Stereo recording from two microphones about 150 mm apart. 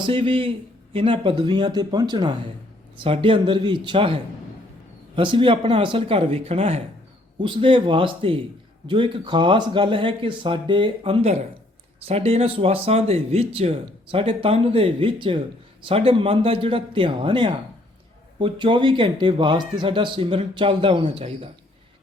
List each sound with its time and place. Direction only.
0.1 s speech: 35° right (ahead or behind)